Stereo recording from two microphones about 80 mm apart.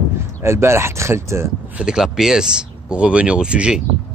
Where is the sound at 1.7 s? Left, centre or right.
Centre.